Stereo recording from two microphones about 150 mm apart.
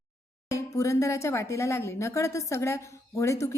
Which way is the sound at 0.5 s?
20° left (ahead or behind).